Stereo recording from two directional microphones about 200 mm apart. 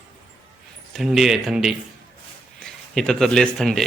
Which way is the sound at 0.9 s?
Centre (ahead or behind).